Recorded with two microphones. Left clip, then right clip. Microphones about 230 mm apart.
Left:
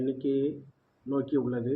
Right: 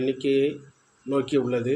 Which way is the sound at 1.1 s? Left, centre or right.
Right.